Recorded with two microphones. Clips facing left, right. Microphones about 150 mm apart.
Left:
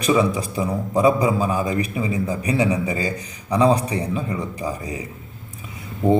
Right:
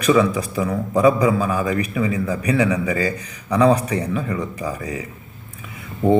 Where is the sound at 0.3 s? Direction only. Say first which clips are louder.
Right 1 dB; 30° left (ahead or behind).